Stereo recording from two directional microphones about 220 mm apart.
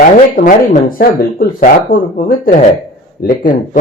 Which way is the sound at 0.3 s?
35° left (ahead or behind).